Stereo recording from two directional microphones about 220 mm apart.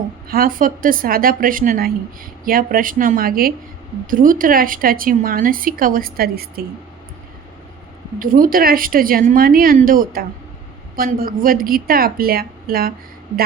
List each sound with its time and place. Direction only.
0.3 s a woman's voice: 40° right (ahead or behind)
8.2 s a woman's voice: 40° right (ahead or behind)